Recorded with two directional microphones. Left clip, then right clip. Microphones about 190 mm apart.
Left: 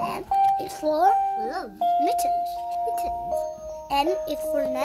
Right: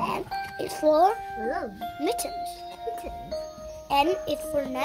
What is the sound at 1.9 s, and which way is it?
Speech, centre (ahead or behind).